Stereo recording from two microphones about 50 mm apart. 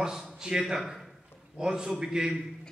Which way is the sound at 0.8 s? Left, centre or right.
Centre.